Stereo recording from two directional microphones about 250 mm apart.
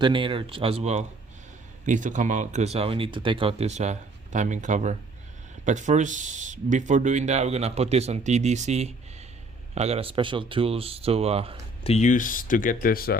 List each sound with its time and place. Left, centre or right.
0.0 s speech: centre
11.8 s speech: left